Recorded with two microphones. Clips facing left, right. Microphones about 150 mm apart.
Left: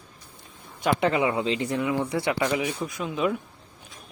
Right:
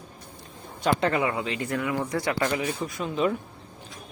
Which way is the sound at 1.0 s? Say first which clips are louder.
Left 2 dB; 20° left (ahead or behind).